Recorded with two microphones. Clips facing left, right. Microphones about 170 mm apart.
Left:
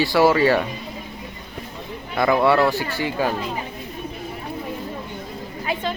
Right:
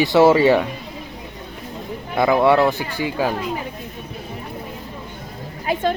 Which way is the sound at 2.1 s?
15° right (ahead or behind).